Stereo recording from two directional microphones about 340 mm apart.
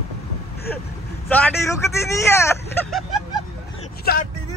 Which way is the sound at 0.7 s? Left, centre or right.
Centre.